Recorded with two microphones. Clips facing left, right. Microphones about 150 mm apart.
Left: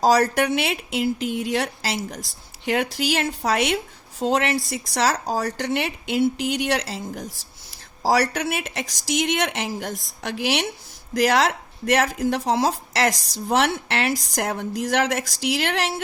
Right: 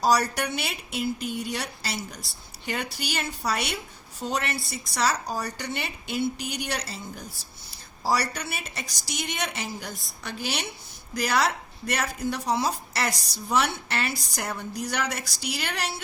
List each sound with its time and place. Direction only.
0.0 s a woman's voice: 90° left
3.4 s a woman's voice: 75° left (ahead or behind)
4.2 s a woman's voice: 90° left; by 5.2 s 70° left (ahead or behind)
5.3 s speech: 85° left